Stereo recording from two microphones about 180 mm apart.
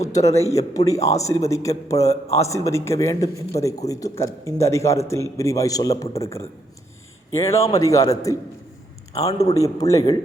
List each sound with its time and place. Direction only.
0.0 s a man's voice: 20° left (ahead or behind)
2.0 s a man's voice: 35° left (ahead or behind)
2.4 s a man's voice: 15° left (ahead or behind)
7.3 s a man's voice: 15° left (ahead or behind)